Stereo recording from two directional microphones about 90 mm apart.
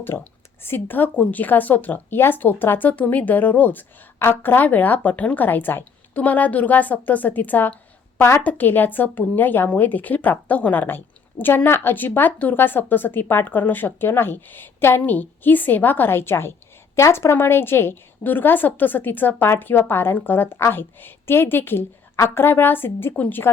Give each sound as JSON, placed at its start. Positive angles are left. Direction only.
{"t": 0.1, "sound": "speech", "side_deg": 20}